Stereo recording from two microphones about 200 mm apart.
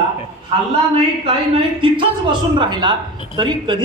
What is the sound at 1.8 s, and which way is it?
A man's voice, 25° right (ahead or behind).